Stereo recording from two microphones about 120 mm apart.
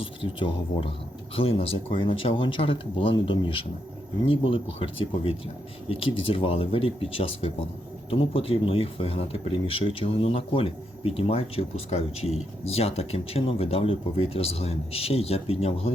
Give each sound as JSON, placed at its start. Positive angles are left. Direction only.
{"t": 0.0, "sound": "speech", "side_deg": 45}